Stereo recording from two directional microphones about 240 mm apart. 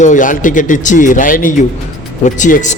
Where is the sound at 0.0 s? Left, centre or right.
Left.